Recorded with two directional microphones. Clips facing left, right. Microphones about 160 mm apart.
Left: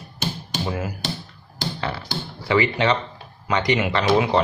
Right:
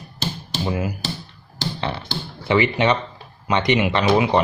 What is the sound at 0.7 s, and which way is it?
Speech, 15° right (ahead or behind).